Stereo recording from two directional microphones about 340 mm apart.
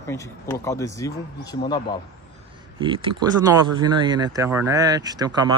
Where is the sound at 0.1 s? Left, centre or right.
Centre.